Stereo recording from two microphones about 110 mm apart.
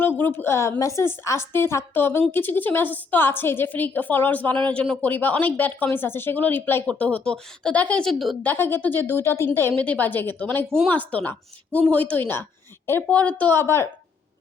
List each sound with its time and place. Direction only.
0.2 s a woman's voice: 20° left (ahead or behind); by 8.4 s centre (ahead or behind)
8.4 s a woman's voice: 20° left (ahead or behind)